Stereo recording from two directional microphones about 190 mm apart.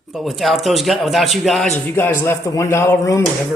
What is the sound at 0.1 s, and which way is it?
Speech, centre (ahead or behind).